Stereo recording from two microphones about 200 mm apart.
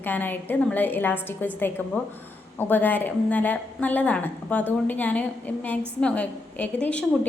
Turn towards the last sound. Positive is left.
turn(degrees=5)  # may be behind; listen again after turning